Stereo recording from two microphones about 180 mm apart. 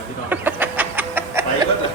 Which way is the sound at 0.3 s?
10° right (ahead or behind).